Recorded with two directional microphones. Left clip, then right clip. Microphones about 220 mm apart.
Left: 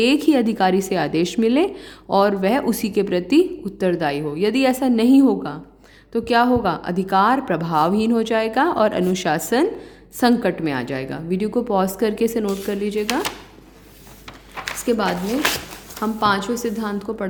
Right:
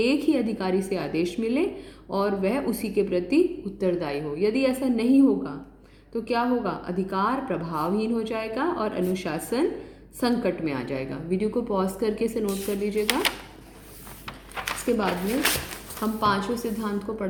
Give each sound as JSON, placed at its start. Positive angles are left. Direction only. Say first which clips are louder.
{"t": 0.0, "sound": "a woman's voice", "louder": "left 6 dB", "side_deg": 40}
{"t": 14.8, "sound": "a woman's voice", "louder": "left 5 dB", "side_deg": 45}